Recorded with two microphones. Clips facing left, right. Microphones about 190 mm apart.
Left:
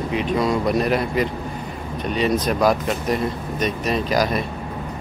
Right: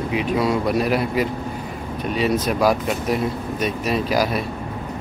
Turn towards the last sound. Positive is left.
turn(degrees=-5)  # may be behind; listen again after turning